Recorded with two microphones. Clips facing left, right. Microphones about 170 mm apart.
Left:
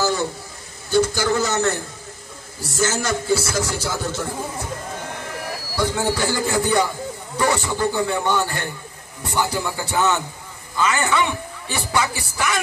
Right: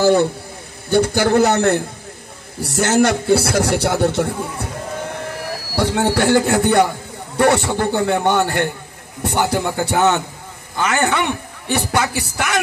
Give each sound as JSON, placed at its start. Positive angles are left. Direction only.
{"t": 0.0, "sound": "a man's voice", "side_deg": -60}
{"t": 5.8, "sound": "a man's voice", "side_deg": -65}